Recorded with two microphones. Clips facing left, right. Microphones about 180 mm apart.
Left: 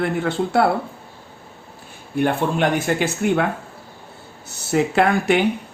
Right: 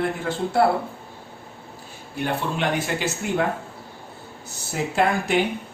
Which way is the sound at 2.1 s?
50° left (ahead or behind).